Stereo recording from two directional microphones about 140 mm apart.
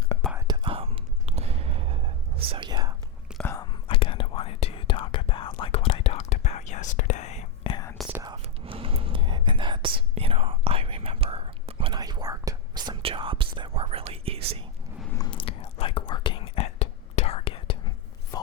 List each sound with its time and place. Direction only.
0.3 s whispering: 30° right (ahead or behind)
3.4 s whispering: 25° left (ahead or behind)
3.8 s whispering: 40° left (ahead or behind)
8.0 s whispering: centre (ahead or behind)
8.6 s whispering: 40° right (ahead or behind)
15.3 s whispering: 40° left (ahead or behind)